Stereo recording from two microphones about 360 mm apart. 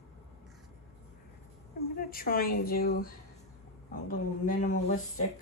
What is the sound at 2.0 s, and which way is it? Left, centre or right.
Speech, left.